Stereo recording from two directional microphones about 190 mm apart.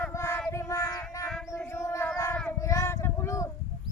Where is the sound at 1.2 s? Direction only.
Centre (ahead or behind).